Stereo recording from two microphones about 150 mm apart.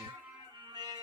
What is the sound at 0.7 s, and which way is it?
Music, 30° right (ahead or behind).